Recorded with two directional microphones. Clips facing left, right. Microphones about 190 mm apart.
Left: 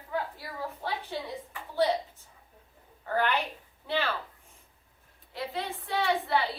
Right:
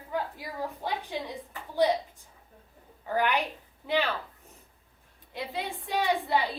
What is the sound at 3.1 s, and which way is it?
A woman's voice, 15° right (ahead or behind).